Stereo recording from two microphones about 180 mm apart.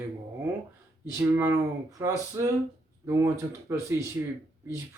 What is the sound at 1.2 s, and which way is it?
Speech, 10° right (ahead or behind).